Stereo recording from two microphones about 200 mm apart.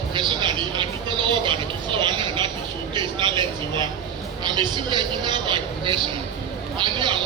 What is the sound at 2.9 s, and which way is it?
A man's voice, 25° right (ahead or behind).